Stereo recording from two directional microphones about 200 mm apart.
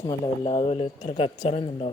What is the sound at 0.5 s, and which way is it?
Speech, 30° left (ahead or behind).